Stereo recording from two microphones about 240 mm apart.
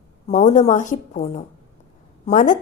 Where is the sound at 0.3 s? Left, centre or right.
Left.